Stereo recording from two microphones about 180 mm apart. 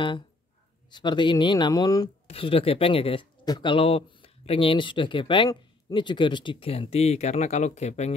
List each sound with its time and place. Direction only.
0.8 s speech: 25° left (ahead or behind)
2.2 s speech: 30° left (ahead or behind)